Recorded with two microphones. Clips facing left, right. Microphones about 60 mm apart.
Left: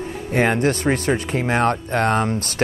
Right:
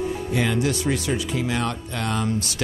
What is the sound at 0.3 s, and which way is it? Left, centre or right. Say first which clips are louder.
Speech: left 6 dB; left.